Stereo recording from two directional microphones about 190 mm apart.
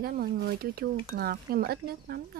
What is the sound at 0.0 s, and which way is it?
Speech, 50° right (ahead or behind).